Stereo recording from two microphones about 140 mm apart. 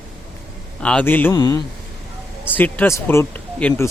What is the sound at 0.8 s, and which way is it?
Speech, 10° left (ahead or behind).